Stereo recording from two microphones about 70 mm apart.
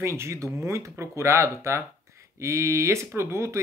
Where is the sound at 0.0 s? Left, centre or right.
Right.